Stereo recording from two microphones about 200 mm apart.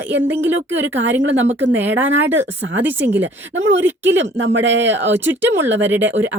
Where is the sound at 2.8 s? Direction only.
10° right (ahead or behind).